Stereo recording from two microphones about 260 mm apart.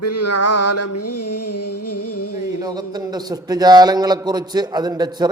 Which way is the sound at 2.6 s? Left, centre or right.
Centre.